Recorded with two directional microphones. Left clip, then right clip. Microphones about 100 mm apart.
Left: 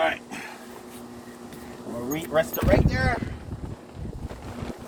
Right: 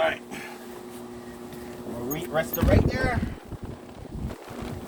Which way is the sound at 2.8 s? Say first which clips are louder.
Left 1 dB; 40° right (ahead or behind).